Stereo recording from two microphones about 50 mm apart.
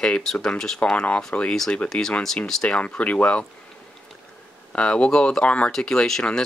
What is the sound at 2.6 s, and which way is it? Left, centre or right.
Speech, left.